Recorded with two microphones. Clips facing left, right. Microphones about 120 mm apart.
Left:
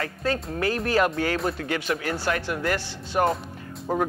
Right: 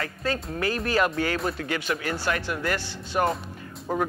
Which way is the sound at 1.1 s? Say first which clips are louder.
Left 1 dB; 30° left (ahead or behind).